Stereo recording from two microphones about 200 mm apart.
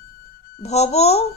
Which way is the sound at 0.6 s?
35° left (ahead or behind).